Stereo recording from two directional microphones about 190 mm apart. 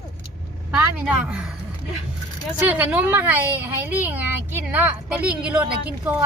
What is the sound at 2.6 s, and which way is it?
A woman's voice, 10° right (ahead or behind).